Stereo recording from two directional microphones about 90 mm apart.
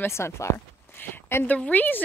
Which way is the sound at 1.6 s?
20° left (ahead or behind).